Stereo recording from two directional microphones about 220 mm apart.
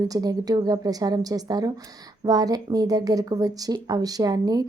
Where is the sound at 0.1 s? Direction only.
15° right (ahead or behind).